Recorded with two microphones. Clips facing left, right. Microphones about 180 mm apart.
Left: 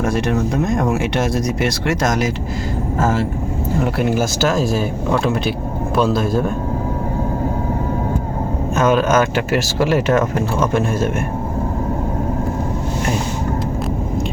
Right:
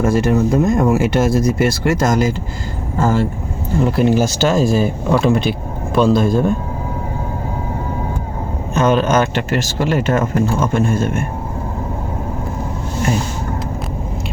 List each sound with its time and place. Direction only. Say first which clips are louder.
0.0 s speech: right 4 dB; centre (ahead or behind)
8.7 s speech: right 1 dB; 5° left (ahead or behind)